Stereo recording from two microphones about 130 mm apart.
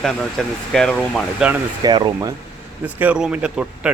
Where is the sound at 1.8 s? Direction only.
35° right (ahead or behind).